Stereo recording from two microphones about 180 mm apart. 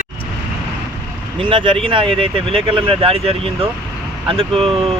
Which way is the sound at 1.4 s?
30° right (ahead or behind).